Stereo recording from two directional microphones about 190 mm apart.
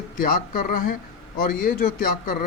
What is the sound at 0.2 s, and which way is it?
A man's voice, 45° left (ahead or behind).